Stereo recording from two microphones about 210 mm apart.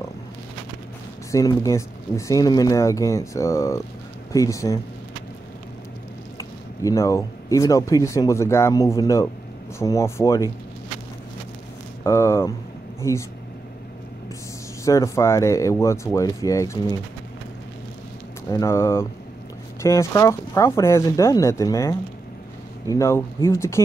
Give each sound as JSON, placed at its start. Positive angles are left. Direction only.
{"t": 1.3, "sound": "speech", "side_deg": 15}
{"t": 6.3, "sound": "speech", "side_deg": 15}
{"t": 12.0, "sound": "speech", "side_deg": 15}
{"t": 14.9, "sound": "speech", "side_deg": 15}
{"t": 18.5, "sound": "speech", "side_deg": 15}